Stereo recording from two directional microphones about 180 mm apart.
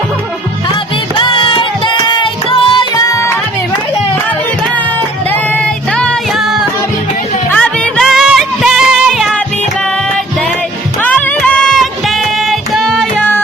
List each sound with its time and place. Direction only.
1.1 s music: 30° left (ahead or behind)
5.3 s music: 5° left (ahead or behind)
11.0 s music: 10° left (ahead or behind)